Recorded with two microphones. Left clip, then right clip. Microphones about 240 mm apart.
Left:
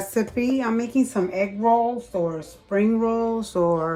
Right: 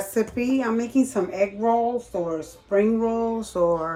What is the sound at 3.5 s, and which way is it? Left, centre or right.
Speech, left.